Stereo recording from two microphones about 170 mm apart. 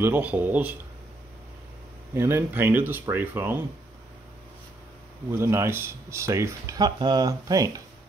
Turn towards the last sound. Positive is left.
turn(degrees=-20)  # may be behind; listen again after turning